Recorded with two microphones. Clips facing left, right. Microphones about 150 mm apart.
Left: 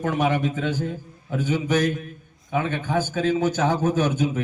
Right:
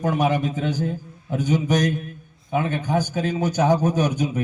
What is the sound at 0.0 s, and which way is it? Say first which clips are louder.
Speech: right 1 dB; 35° right (ahead or behind).